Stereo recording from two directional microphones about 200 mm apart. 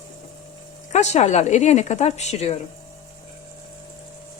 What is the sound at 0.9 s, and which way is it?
Speech, 35° left (ahead or behind).